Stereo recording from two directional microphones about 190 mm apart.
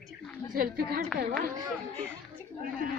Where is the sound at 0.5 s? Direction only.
50° right (ahead or behind).